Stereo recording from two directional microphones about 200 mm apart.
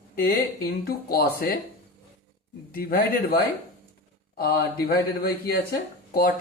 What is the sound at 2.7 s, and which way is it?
A man's voice, 45° left (ahead or behind).